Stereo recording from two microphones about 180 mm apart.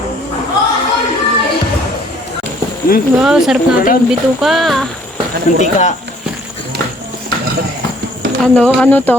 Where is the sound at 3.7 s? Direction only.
50° left (ahead or behind).